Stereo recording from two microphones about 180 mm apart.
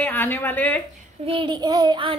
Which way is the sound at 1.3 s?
25° right (ahead or behind).